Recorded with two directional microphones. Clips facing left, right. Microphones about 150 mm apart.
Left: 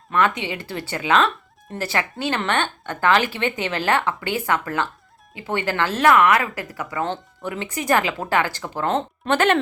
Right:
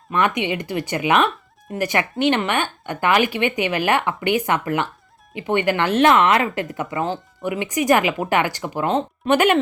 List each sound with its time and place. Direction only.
0.1 s speech: 15° right (ahead or behind)
7.0 s speech: 10° right (ahead or behind)